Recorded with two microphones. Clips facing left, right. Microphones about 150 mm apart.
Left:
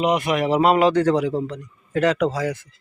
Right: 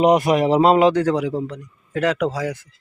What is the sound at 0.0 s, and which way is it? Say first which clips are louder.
Speech: right 5 dB; 40° right (ahead or behind).